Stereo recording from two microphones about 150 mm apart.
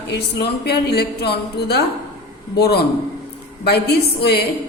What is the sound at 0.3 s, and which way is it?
A woman's voice, 90° left.